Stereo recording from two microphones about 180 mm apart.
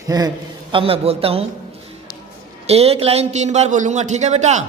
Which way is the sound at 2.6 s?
35° right (ahead or behind).